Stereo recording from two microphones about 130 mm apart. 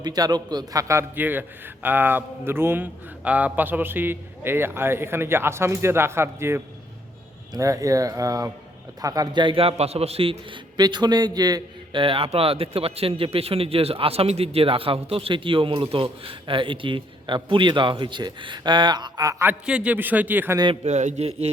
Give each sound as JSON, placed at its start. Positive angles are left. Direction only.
{"t": 0.0, "sound": "a man's voice", "side_deg": -30}
{"t": 19.5, "sound": "a man's voice", "side_deg": -10}
{"t": 20.8, "sound": "speech", "side_deg": -65}